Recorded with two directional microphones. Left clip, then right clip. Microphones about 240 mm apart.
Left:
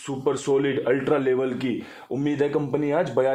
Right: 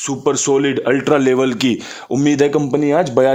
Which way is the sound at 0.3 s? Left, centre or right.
Right.